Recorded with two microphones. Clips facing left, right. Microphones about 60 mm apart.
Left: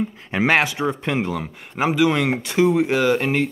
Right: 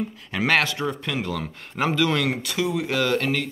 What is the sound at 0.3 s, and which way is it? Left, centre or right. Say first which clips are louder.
Speech: left 3 dB; left.